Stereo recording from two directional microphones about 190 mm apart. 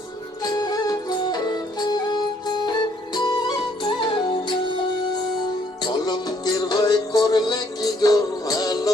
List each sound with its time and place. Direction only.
0.4 s music: 20° left (ahead or behind)
5.8 s music: 20° left (ahead or behind)